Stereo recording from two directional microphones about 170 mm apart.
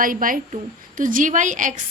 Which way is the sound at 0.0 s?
55° right (ahead or behind).